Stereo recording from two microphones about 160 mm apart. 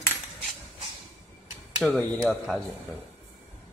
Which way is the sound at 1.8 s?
Centre (ahead or behind).